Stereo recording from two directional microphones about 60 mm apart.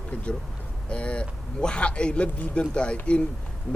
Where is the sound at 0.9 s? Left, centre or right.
Centre.